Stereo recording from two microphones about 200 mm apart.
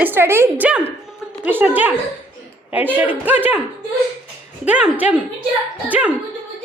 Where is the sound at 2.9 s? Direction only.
10° right (ahead or behind).